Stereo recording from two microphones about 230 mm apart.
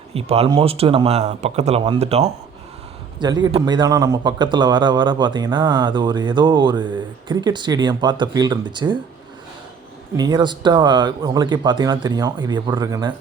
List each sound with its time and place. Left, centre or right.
0.1 s a man's voice: right
10.2 s a man's voice: centre